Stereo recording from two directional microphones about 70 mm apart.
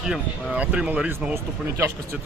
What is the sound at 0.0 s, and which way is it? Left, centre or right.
A man's voice, centre.